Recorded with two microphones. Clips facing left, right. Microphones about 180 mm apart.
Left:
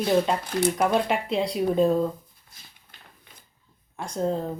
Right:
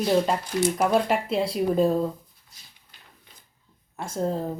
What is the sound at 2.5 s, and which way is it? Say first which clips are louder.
Dog: left 4 dB; 55° left (ahead or behind).